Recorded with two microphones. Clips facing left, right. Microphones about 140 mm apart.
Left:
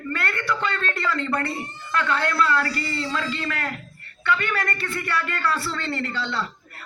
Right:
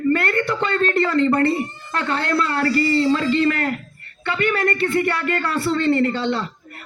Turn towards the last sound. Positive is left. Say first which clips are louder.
# right 10 dB
turn(degrees=-25)  # may be behind; listen again after turning